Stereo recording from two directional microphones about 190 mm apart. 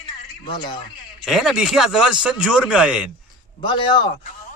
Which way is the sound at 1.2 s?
Centre (ahead or behind).